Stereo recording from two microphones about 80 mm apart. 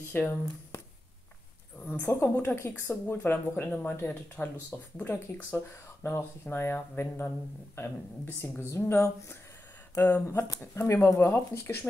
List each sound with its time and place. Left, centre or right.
0.1 s speech: left
1.9 s speech: left